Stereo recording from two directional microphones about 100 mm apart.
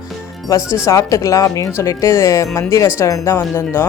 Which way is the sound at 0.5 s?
30° left (ahead or behind).